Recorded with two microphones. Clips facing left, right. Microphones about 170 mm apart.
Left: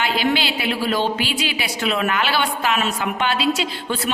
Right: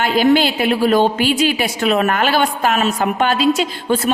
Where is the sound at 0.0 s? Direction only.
45° right (ahead or behind).